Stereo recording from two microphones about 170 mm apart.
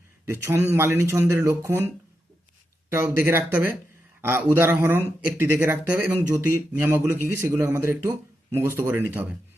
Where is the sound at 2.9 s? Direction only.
15° right (ahead or behind).